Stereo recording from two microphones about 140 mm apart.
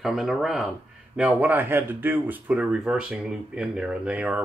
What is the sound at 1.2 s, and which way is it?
Speech, 10° right (ahead or behind).